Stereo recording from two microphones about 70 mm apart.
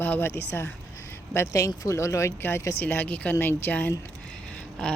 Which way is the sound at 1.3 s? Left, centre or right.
Left.